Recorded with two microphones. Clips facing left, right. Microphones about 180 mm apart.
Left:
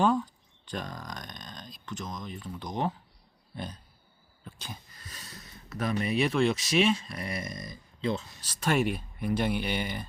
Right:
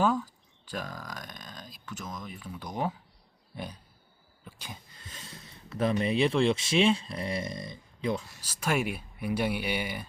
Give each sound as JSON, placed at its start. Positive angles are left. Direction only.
{"t": 0.6, "sound": "speech", "side_deg": -5}
{"t": 3.5, "sound": "grunt", "side_deg": -10}
{"t": 4.4, "sound": "speech", "side_deg": -10}
{"t": 4.9, "sound": "speech", "side_deg": -25}
{"t": 8.0, "sound": "speech", "side_deg": -15}